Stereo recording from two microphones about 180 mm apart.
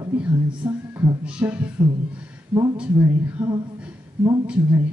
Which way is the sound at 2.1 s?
5° right (ahead or behind).